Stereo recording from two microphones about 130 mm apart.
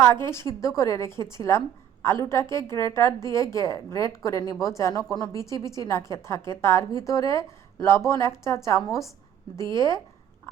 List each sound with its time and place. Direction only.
0.3 s a woman's voice: 25° left (ahead or behind)